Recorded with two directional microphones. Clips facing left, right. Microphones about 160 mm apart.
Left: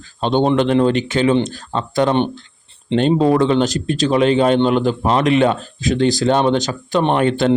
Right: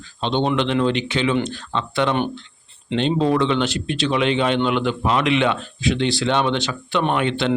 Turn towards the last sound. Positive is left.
turn(degrees=40)  # may be behind; listen again after turning